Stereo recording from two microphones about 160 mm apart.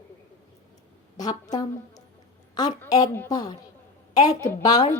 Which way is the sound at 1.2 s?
25° left (ahead or behind).